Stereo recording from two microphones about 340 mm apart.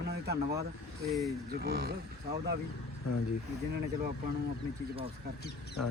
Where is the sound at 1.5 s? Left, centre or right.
Right.